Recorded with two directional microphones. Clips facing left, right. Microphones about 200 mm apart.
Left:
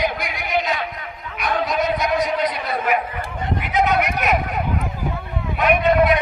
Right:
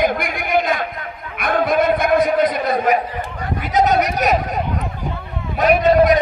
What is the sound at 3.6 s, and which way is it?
Speech, 40° right (ahead or behind).